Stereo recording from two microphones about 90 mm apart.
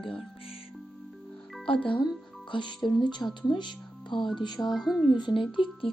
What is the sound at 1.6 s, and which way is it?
Speech, 75° left (ahead or behind).